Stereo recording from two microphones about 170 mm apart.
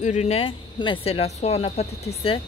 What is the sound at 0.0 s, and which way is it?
Speech, 45° left (ahead or behind).